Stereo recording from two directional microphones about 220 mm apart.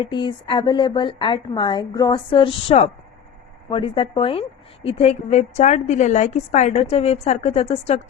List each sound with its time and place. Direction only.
0.0 s a woman's voice: 20° left (ahead or behind)